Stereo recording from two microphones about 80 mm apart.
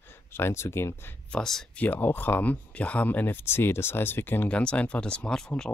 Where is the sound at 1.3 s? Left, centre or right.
Centre.